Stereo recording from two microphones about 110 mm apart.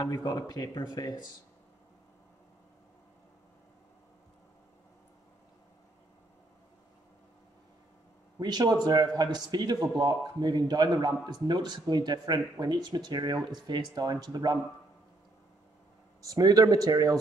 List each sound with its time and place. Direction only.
0.0 s speech: 35° left (ahead or behind)
8.4 s speech: 40° right (ahead or behind)
16.2 s speech: 35° right (ahead or behind)